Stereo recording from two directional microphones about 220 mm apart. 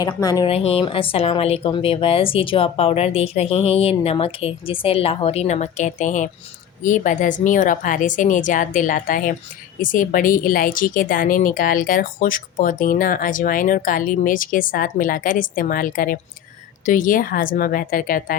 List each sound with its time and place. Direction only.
0.0 s a woman's voice: 15° left (ahead or behind); by 18.3 s 40° left (ahead or behind)